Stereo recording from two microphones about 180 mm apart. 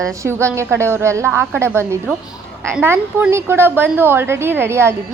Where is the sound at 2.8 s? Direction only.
15° right (ahead or behind).